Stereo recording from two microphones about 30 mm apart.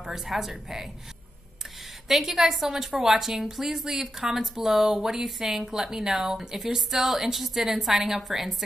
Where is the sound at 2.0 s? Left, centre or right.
Centre.